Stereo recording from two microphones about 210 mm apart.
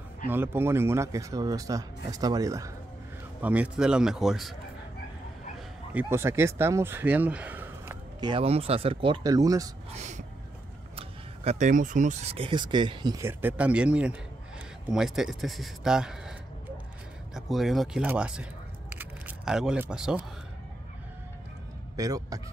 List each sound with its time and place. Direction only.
0.3 s speech: 10° right (ahead or behind)
5.9 s speech: 10° right (ahead or behind)
8.2 s speech: 25° right (ahead or behind)
9.9 s speech: 35° right (ahead or behind); by 18.5 s 5° right (ahead or behind)
18.9 s camera: 5° right (ahead or behind)
21.9 s speech: 15° right (ahead or behind)